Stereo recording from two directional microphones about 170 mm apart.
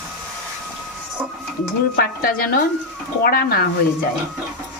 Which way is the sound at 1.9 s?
60° left (ahead or behind).